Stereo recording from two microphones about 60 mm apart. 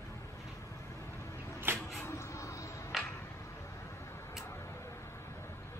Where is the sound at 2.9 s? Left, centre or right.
Centre.